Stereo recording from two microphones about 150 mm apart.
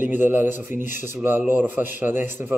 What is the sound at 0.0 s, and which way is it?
A man's voice, 10° right (ahead or behind).